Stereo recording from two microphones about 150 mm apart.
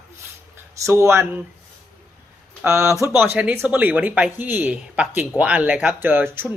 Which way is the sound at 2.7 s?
20° right (ahead or behind).